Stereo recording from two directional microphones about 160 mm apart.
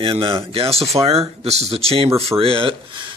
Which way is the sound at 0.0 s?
35° right (ahead or behind).